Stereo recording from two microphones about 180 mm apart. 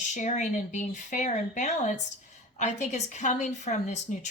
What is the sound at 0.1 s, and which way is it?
A woman's voice, 40° left (ahead or behind).